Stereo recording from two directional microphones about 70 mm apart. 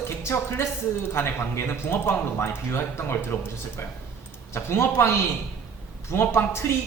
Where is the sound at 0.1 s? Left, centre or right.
Left.